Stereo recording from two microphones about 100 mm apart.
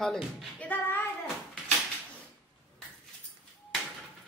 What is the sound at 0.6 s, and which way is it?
Female singing, 20° left (ahead or behind).